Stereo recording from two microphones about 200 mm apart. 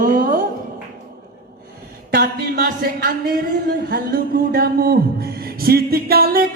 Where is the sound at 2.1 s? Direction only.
50° right (ahead or behind).